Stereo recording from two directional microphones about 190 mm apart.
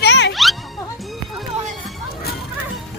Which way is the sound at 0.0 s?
65° left (ahead or behind).